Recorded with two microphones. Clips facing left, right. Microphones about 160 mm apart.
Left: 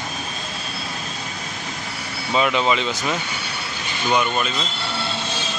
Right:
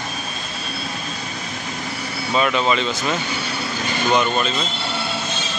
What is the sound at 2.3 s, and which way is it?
Speech, 15° left (ahead or behind).